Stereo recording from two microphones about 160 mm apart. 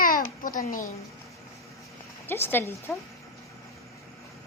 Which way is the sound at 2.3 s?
15° left (ahead or behind).